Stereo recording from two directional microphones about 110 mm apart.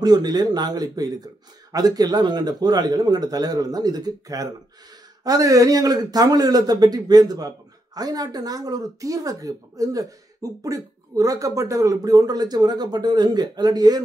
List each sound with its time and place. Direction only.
0.0 s a man's voice: 35° right (ahead or behind)